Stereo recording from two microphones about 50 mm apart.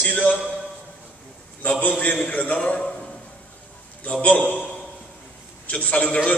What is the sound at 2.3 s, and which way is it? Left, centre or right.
Speech, left.